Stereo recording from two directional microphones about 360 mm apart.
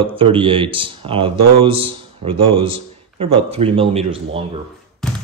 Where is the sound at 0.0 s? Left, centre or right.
Centre.